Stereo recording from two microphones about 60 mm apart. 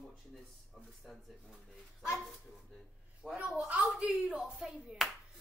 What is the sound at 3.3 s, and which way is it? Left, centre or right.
A woman's voice, right.